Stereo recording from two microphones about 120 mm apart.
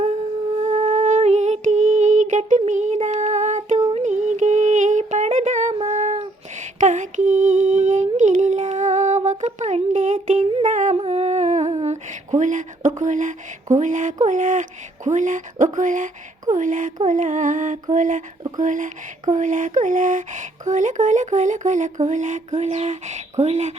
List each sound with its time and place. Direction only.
0.0 s music: 70° right (ahead or behind); by 5.7 s 85° right
5.8 s child singing: 75° right (ahead or behind)
6.7 s a sound: 90° right
10.6 s humming: 80° right
11.0 s humming: 60° right (ahead or behind); by 14.2 s 90° right
14.3 s speech: 90° right; by 23.7 s 75° right (ahead or behind)